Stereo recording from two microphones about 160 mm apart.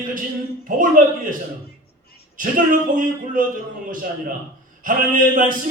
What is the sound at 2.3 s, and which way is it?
A man's voice, 55° right (ahead or behind).